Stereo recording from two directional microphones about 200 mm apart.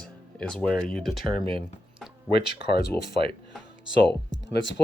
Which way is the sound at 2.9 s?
10° left (ahead or behind).